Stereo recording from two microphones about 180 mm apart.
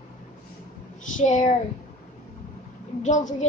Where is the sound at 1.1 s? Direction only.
45° left (ahead or behind).